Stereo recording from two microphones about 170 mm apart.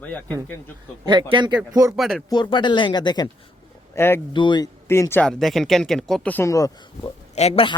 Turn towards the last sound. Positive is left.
turn(degrees=35)  # may be behind; listen again after turning